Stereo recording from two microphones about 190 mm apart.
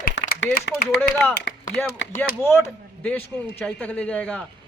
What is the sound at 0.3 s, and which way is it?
Speech, 65° left (ahead or behind).